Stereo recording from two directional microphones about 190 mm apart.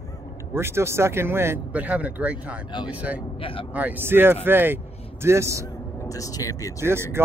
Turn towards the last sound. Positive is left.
turn(degrees=-15)  # may be behind; listen again after turning